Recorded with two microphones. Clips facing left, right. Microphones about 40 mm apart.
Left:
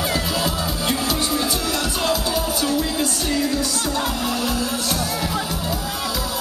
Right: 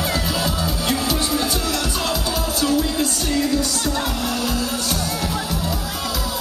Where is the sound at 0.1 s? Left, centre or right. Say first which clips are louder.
Even; centre.